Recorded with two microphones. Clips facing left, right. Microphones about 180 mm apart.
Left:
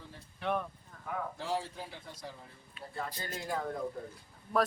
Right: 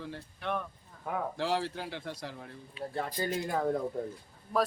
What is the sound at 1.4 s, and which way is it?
A man's voice, 85° right.